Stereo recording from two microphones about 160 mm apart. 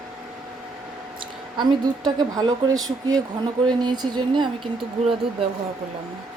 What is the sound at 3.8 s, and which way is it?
Speech, 25° right (ahead or behind).